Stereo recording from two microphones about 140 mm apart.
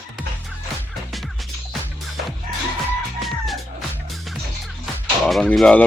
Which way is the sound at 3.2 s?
Centre (ahead or behind).